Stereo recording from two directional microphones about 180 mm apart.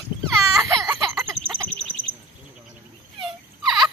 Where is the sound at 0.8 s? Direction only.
Centre (ahead or behind).